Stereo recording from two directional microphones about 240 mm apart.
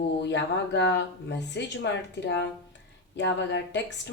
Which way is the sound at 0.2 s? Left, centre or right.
Left.